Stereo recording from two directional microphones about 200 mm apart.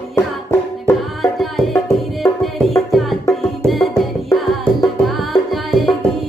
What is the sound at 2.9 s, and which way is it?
Music, centre (ahead or behind).